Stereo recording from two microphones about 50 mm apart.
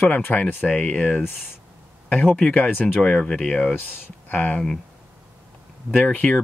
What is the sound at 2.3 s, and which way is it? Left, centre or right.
Speech, centre.